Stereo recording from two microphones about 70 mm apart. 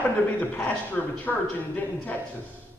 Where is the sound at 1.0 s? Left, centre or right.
Left.